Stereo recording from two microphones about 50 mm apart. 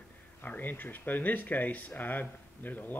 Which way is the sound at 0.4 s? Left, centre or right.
Left.